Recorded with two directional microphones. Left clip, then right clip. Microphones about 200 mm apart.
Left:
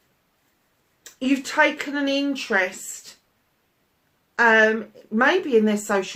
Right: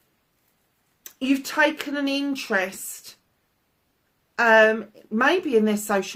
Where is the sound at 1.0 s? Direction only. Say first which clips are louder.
Left 1 dB; 50° right (ahead or behind).